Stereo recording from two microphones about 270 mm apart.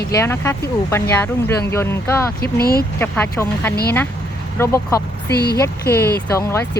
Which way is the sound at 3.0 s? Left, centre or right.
Centre.